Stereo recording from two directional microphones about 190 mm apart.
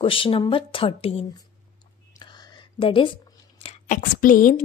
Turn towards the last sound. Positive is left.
turn(degrees=45)  # may be behind; listen again after turning